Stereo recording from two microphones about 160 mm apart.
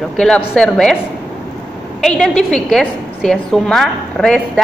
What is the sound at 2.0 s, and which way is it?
A woman's voice, 5° left (ahead or behind).